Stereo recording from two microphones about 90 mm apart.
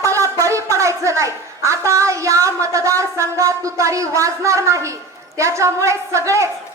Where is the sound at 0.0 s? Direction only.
35° right (ahead or behind).